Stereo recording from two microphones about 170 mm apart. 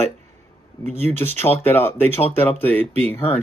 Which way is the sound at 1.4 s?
10° left (ahead or behind).